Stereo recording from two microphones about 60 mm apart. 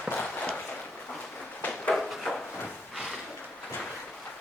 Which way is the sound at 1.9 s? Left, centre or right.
Centre.